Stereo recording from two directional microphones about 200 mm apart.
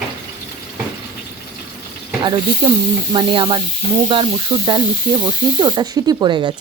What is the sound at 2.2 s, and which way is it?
Speech, 25° right (ahead or behind).